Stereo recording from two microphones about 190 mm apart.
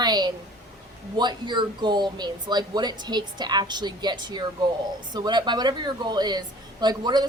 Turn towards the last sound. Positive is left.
turn(degrees=-25)  # may be behind; listen again after turning